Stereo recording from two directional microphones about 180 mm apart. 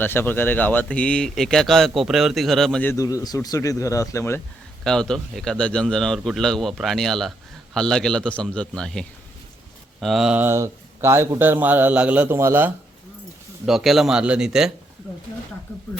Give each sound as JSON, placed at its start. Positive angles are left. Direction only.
{"t": 0.0, "sound": "a man's voice", "side_deg": 10}
{"t": 2.9, "sound": "speech", "side_deg": 20}
{"t": 4.8, "sound": "a man's voice", "side_deg": 5}
{"t": 13.7, "sound": "a man's voice", "side_deg": 0}
{"t": 15.7, "sound": "speech", "side_deg": 15}